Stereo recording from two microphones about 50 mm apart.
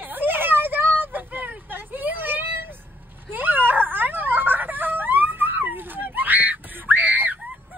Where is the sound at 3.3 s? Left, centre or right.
Right.